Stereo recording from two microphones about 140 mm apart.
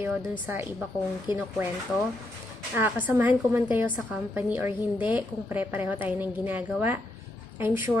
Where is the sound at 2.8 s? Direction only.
15° right (ahead or behind).